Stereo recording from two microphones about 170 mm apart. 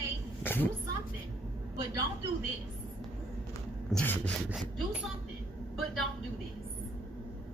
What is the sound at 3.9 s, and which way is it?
Speech, 10° left (ahead or behind).